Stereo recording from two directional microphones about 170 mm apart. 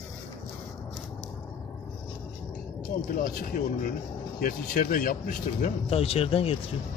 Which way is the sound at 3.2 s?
55° left (ahead or behind).